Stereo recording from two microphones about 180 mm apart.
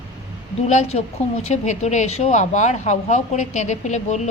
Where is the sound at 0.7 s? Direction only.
35° left (ahead or behind).